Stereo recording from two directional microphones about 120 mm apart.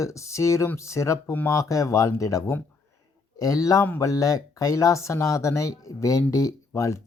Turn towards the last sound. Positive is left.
turn(degrees=25)  # may be behind; listen again after turning